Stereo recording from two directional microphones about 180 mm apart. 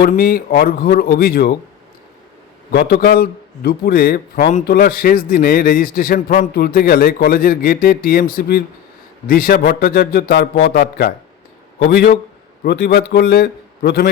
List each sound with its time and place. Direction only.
0.0 s a man's voice: 55° left (ahead or behind)
2.7 s a man's voice: 55° left (ahead or behind)